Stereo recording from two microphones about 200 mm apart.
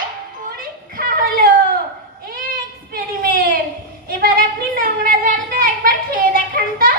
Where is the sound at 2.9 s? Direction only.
50° right (ahead or behind).